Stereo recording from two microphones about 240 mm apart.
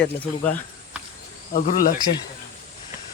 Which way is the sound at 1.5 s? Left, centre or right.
Left.